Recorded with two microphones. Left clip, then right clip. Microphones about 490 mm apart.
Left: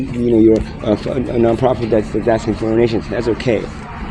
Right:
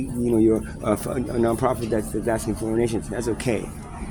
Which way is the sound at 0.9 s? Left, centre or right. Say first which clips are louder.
Left 7 dB; right.